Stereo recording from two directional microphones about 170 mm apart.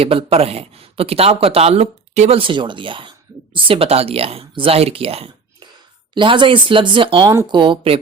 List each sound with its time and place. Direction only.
0.0 s speech: 35° right (ahead or behind)